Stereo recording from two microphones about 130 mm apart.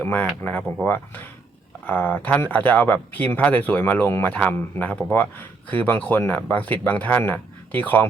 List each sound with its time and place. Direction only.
0.0 s speech: 15° left (ahead or behind)